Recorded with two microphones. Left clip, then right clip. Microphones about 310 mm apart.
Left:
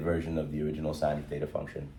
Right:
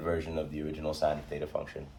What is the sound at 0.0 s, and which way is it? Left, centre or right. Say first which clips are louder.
Speech: left 1 dB; right.